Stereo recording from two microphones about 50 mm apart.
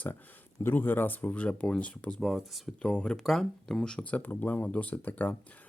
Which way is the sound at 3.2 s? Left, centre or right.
Centre.